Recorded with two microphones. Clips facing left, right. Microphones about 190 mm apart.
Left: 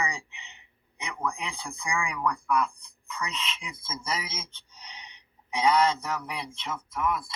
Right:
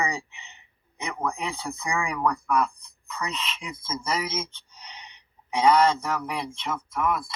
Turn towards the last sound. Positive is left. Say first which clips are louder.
# right 3 dB
turn(degrees=-60)  # may be behind; listen again after turning